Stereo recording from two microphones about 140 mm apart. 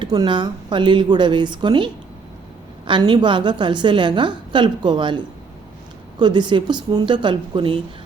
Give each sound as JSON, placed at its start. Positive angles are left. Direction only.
{"t": 0.0, "sound": "a woman's voice", "side_deg": -30}